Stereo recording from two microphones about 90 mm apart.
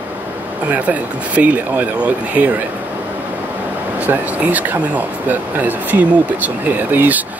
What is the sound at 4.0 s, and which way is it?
Speech, 15° right (ahead or behind).